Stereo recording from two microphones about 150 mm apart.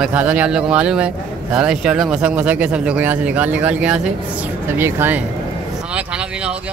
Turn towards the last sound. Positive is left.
turn(degrees=-15)  # may be behind; listen again after turning